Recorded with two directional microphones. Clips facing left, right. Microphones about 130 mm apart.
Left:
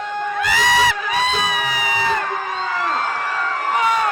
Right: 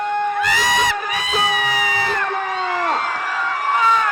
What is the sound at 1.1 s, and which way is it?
Crowd, 30° left (ahead or behind).